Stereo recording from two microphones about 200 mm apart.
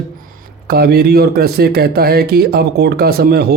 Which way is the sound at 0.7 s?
50° right (ahead or behind).